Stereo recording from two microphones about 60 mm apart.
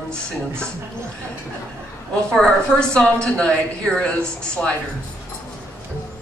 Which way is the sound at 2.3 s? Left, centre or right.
Centre.